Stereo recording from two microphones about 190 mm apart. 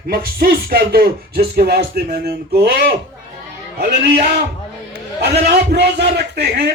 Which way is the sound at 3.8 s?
60° right (ahead or behind).